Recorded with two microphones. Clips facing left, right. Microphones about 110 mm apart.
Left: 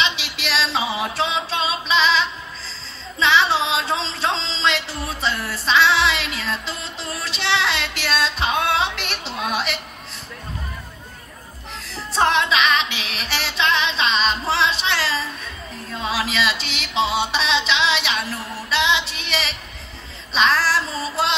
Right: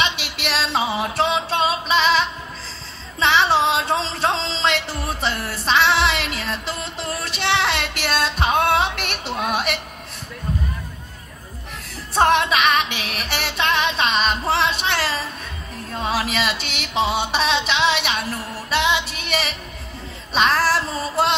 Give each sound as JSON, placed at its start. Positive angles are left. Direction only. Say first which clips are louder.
{"t": 0.1, "sound": "music", "louder": "even", "side_deg": -55}
{"t": 12.2, "sound": "music", "louder": "right 2 dB", "side_deg": -50}